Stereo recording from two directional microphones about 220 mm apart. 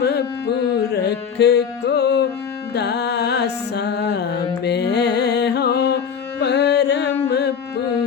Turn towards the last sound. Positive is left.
turn(degrees=50)  # may be behind; listen again after turning